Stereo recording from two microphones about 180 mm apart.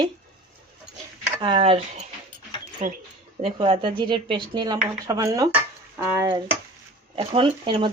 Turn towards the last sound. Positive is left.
turn(degrees=-30)  # may be behind; listen again after turning